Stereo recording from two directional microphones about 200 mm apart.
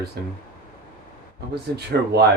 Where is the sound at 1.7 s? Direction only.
55° right (ahead or behind).